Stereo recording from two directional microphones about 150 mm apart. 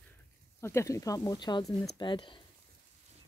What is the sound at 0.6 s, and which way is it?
Speech, 15° left (ahead or behind).